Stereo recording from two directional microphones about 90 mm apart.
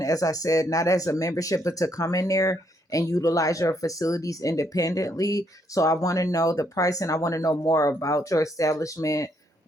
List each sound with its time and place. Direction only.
0.0 s speech: 40° left (ahead or behind)